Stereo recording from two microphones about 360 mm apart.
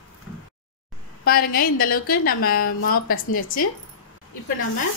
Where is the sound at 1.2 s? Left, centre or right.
Left.